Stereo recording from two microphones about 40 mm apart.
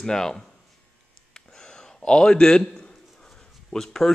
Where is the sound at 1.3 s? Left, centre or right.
Centre.